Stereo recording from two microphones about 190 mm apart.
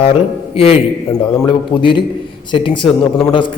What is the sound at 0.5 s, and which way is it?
A man's voice, 30° left (ahead or behind).